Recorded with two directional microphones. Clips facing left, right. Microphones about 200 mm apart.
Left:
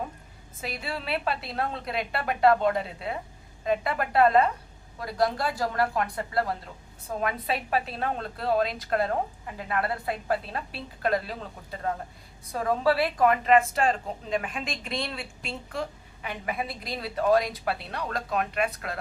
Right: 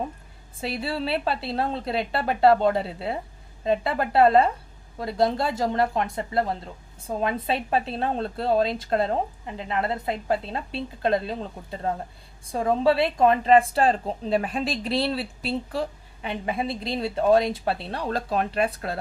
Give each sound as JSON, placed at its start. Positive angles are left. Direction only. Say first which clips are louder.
{"t": 0.6, "sound": "a woman's voice", "louder": "right 6 dB", "side_deg": -30}